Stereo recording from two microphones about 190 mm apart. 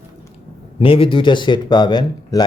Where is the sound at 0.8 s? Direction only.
30° left (ahead or behind).